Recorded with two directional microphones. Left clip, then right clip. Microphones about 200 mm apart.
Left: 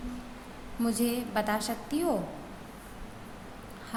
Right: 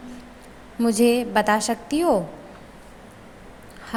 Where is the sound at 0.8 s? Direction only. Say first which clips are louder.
Right 12 dB; 35° right (ahead or behind).